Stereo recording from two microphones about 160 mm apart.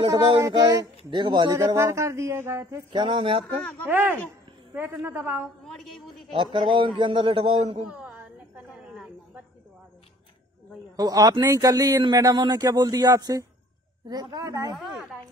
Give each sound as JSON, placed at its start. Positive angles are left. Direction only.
{"t": 0.0, "sound": "speech", "side_deg": -25}
{"t": 2.9, "sound": "speech", "side_deg": -30}
{"t": 3.8, "sound": "a woman's voice", "side_deg": -15}
{"t": 5.7, "sound": "a woman's voice", "side_deg": 0}
{"t": 6.3, "sound": "speech", "side_deg": -30}
{"t": 7.9, "sound": "a sound", "side_deg": -10}
{"t": 11.0, "sound": "speech", "side_deg": -25}
{"t": 14.8, "sound": "a sound", "side_deg": 0}